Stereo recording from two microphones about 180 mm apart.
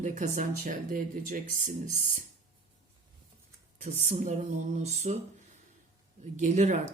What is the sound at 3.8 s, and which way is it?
Speech, 40° right (ahead or behind).